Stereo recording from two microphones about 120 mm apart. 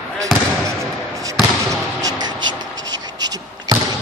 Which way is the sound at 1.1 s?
30° right (ahead or behind).